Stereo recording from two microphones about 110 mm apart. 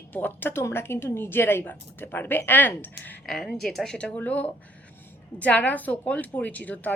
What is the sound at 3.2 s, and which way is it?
A woman's voice, 5° left (ahead or behind).